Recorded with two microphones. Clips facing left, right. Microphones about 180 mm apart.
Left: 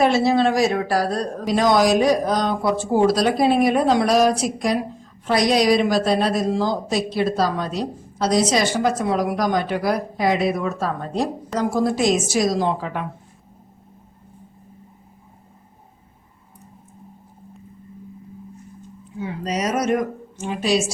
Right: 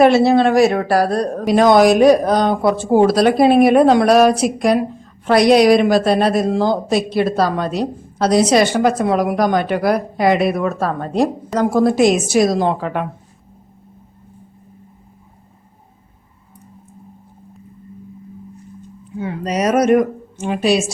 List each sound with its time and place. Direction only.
0.0 s a woman's voice: 65° right (ahead or behind)
19.2 s speech: 60° right (ahead or behind)